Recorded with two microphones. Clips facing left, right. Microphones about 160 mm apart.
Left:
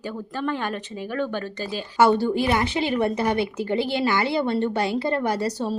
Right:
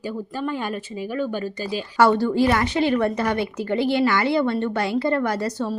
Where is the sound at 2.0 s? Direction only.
25° left (ahead or behind).